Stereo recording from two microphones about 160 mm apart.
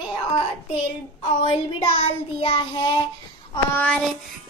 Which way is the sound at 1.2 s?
35° left (ahead or behind).